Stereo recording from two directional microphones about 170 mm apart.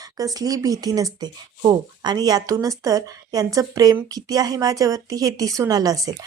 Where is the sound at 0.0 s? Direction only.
20° right (ahead or behind).